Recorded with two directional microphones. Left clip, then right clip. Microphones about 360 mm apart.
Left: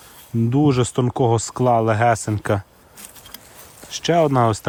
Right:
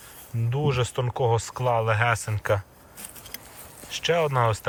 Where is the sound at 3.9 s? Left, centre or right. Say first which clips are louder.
Left 6 dB; centre.